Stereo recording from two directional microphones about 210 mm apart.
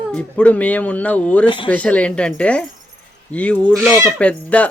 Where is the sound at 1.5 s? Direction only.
25° left (ahead or behind).